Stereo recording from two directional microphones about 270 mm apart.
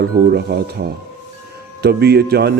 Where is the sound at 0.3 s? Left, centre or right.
Right.